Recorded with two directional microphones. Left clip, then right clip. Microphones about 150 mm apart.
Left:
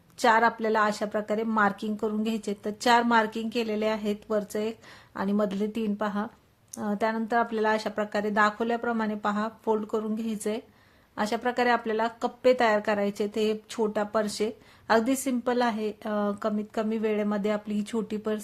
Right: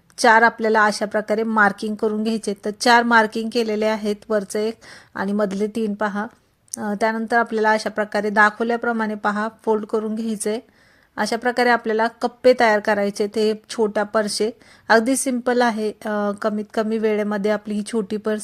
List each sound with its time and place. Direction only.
0.2 s speech: 35° right (ahead or behind)